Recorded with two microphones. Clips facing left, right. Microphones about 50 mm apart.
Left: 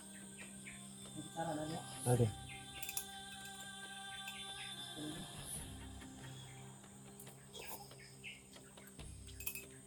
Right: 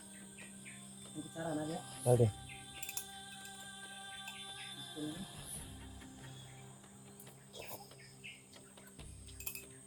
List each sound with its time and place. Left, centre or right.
1.1 s music: centre